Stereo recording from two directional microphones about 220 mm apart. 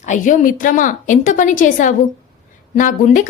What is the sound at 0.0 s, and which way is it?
Speech, 35° left (ahead or behind).